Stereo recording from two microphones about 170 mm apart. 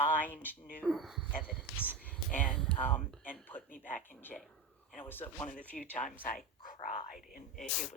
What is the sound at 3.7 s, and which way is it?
Speech, 55° left (ahead or behind).